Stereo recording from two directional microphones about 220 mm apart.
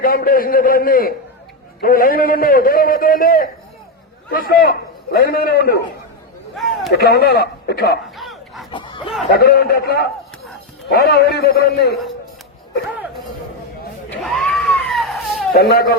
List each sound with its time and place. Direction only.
0.0 s a man's voice: 40° left (ahead or behind)
6.6 s a sound: centre (ahead or behind)
6.9 s a man's voice: 45° left (ahead or behind)
8.1 s bow-wow: centre (ahead or behind)
8.7 s speech: 20° left (ahead or behind)
9.3 s a man's voice: 45° left (ahead or behind)
14.1 s a sound: centre (ahead or behind)
15.5 s a man's voice: 50° left (ahead or behind)